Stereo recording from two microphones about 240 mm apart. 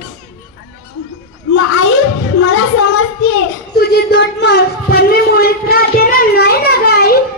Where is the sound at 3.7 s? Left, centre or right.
Left.